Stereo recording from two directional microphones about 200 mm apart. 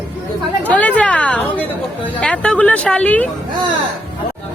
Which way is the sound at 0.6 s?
5° left (ahead or behind).